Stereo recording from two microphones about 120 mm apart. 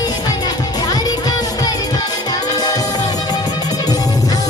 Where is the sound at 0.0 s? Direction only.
35° left (ahead or behind).